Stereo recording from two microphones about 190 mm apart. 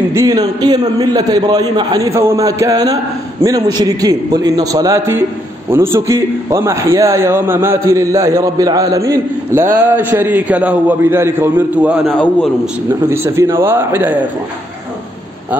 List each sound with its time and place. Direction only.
0.1 s a man's voice: 15° right (ahead or behind)
13.1 s a man's voice: 15° right (ahead or behind)